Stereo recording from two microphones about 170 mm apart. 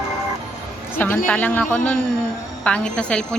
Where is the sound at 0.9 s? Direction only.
10° left (ahead or behind).